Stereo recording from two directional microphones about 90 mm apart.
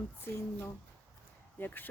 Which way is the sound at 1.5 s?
20° left (ahead or behind).